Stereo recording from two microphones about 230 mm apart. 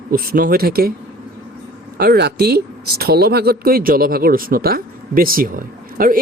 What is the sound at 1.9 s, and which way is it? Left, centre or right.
Speech, right.